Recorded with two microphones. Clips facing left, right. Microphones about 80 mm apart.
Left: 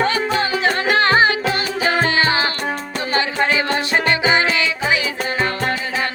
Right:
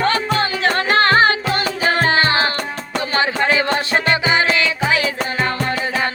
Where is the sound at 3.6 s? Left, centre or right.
Left.